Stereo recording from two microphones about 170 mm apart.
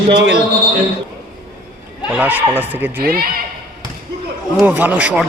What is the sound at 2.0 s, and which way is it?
Speech, 10° right (ahead or behind).